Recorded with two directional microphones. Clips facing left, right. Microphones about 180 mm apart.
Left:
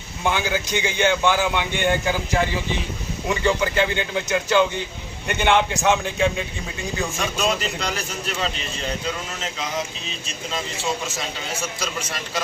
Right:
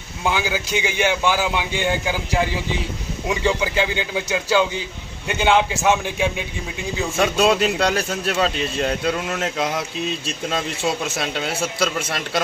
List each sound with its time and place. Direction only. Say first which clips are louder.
0.2 s a man's voice: even; 10° right (ahead or behind)
7.2 s speech: right 9 dB; 70° right (ahead or behind)
11.1 s speech: right 6 dB; 65° right (ahead or behind)